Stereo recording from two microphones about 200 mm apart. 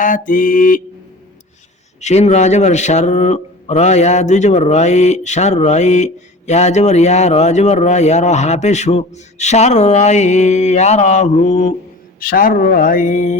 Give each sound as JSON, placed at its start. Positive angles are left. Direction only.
{"t": 0.0, "sound": "speech", "side_deg": 45}
{"t": 2.0, "sound": "a man's voice", "side_deg": 35}
{"t": 12.2, "sound": "speech", "side_deg": 45}